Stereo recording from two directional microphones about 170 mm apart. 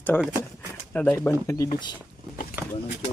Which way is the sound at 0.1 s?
Centre (ahead or behind).